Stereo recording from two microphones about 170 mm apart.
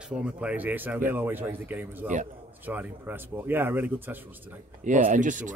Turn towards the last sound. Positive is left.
turn(degrees=-50)  # may be behind; listen again after turning